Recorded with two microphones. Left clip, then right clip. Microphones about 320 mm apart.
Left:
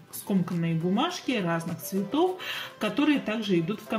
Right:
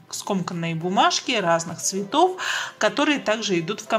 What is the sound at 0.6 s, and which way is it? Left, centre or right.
Speech, centre.